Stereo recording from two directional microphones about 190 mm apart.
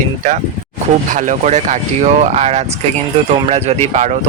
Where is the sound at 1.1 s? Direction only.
40° right (ahead or behind).